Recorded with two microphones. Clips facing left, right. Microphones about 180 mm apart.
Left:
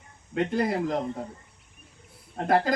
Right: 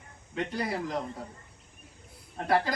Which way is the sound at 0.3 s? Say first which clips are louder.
Left 6 dB; 50° left (ahead or behind).